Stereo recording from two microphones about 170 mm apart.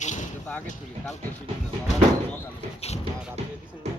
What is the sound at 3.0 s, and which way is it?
Music, 40° right (ahead or behind).